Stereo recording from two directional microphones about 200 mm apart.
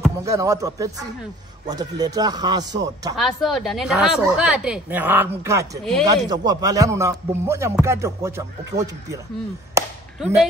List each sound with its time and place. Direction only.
0.2 s speech: 15° right (ahead or behind)
3.2 s a woman's voice: centre (ahead or behind); by 9.2 s 15° right (ahead or behind)